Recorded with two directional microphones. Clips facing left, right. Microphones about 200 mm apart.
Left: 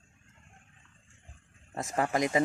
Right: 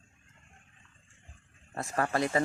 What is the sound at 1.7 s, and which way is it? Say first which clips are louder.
Speech: left 1 dB; 15° left (ahead or behind).